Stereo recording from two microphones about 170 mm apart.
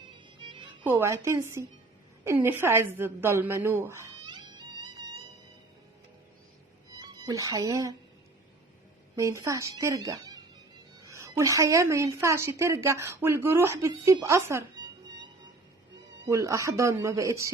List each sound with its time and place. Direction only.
0.3 s music: 30° right (ahead or behind)
0.9 s a woman's voice: 15° right (ahead or behind)
7.0 s speech: 20° right (ahead or behind)
9.1 s a woman's voice: 15° right (ahead or behind)
14.0 s music: 20° right (ahead or behind)
16.2 s a woman's voice: 20° right (ahead or behind)